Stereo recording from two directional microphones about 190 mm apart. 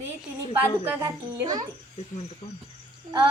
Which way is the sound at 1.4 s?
20° right (ahead or behind).